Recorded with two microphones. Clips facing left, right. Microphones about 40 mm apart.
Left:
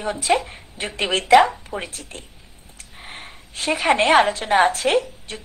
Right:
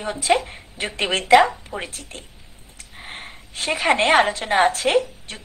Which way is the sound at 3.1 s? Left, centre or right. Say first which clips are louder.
Right 1 dB; right.